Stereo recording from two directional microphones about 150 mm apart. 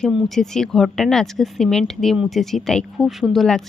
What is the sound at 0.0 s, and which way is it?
Speech, centre (ahead or behind).